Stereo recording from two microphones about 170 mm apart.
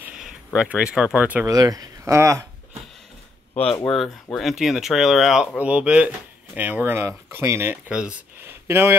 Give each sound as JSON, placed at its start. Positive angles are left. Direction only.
{"t": 0.0, "sound": "speech", "side_deg": -5}
{"t": 1.5, "sound": "speech", "side_deg": -20}
{"t": 3.9, "sound": "speech", "side_deg": 0}